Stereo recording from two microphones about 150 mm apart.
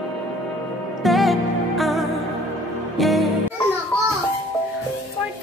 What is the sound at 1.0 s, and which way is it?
Music, centre (ahead or behind).